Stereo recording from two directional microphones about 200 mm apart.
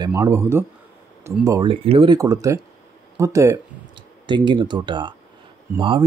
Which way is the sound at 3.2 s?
15° right (ahead or behind).